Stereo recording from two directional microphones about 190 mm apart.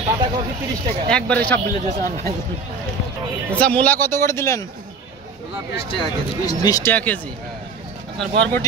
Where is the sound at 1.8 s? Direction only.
40° right (ahead or behind).